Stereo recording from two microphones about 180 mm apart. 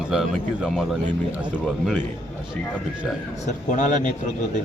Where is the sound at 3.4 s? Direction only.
45° left (ahead or behind).